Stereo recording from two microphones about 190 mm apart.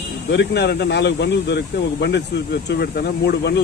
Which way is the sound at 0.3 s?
60° left (ahead or behind).